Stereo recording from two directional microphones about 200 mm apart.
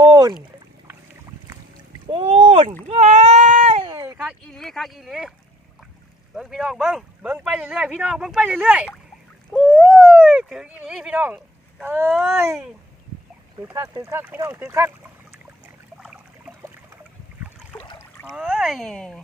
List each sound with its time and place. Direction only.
0.0 s rowboat: 20° right (ahead or behind)
2.0 s rowboat: 30° right (ahead or behind)
2.8 s a sound: 35° right (ahead or behind)
3.9 s a sound: 15° right (ahead or behind)
4.2 s speech: centre (ahead or behind)
6.3 s speech: centre (ahead or behind)
13.6 s speech: 15° right (ahead or behind)
17.9 s a sound: 10° left (ahead or behind)
18.3 s speech: 5° right (ahead or behind)